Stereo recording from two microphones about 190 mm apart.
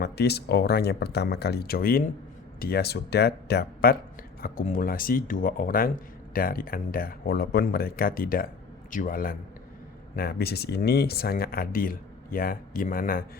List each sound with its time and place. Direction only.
0.0 s speech: 60° left (ahead or behind)